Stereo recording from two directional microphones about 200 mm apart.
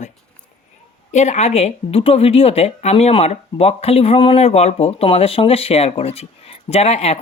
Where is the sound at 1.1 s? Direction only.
35° left (ahead or behind).